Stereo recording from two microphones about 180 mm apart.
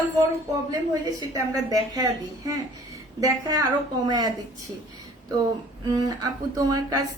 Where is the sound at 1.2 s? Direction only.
20° right (ahead or behind).